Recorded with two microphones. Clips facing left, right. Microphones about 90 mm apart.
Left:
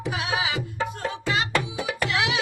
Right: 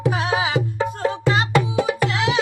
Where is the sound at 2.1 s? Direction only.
35° right (ahead or behind).